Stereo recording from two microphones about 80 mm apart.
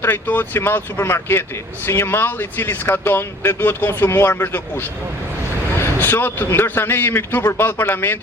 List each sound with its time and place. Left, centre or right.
0.0 s speech: left